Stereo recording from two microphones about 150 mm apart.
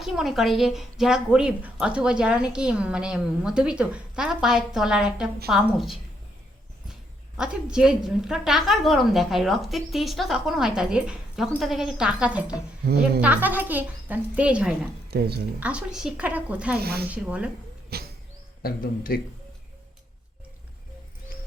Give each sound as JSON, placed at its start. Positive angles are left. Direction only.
{"t": 0.0, "sound": "a woman's voice", "side_deg": 0}
{"t": 7.3, "sound": "a woman's voice", "side_deg": -5}
{"t": 15.1, "sound": "speech", "side_deg": -90}
{"t": 15.6, "sound": "a woman's voice", "side_deg": -5}
{"t": 16.8, "sound": "speech", "side_deg": -90}
{"t": 17.1, "sound": "a woman's voice", "side_deg": -10}
{"t": 17.8, "sound": "a sound", "side_deg": -90}
{"t": 18.6, "sound": "speech", "side_deg": 80}